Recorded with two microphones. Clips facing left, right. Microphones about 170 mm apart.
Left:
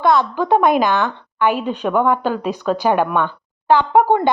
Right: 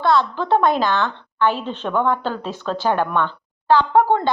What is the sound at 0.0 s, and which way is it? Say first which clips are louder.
A woman's voice: left 2 dB; 15° left (ahead or behind).